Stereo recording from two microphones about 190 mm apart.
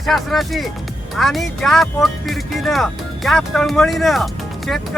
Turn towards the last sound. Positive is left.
turn(degrees=0)  # may be behind; listen again after turning